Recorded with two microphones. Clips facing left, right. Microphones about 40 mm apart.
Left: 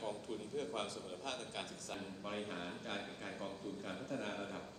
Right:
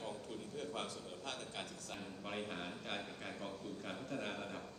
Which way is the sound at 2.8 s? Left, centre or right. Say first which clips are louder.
Even; right.